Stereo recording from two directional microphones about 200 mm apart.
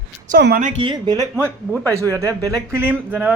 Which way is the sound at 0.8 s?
20° right (ahead or behind).